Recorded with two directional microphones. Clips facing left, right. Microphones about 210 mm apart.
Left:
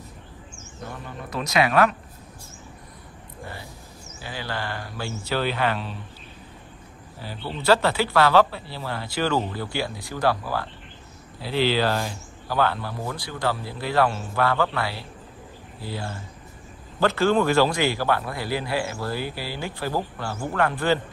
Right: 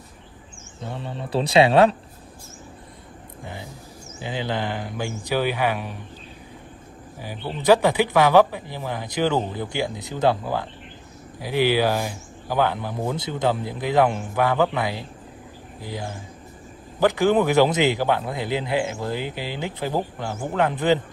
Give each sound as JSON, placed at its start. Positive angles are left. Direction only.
{"t": 0.8, "sound": "speech", "side_deg": -25}
{"t": 4.2, "sound": "speech", "side_deg": -20}
{"t": 7.2, "sound": "speech", "side_deg": -15}